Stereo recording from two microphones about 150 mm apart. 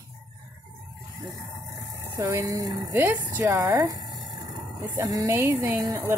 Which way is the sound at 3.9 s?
30° right (ahead or behind).